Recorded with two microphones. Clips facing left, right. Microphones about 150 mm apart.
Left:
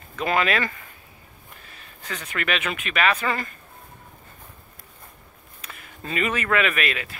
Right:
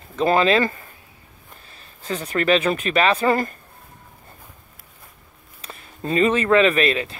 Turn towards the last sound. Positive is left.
turn(degrees=-30)  # may be behind; listen again after turning